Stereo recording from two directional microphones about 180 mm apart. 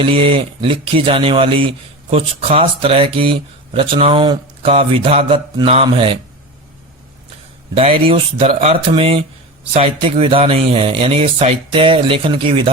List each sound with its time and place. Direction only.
0.0 s speech: 30° right (ahead or behind)
7.8 s speech: 30° right (ahead or behind)